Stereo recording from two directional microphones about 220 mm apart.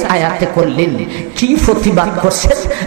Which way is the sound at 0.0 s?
15° right (ahead or behind).